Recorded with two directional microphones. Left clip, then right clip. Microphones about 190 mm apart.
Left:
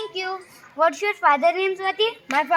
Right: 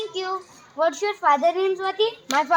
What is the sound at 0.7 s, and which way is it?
Speech, 15° right (ahead or behind).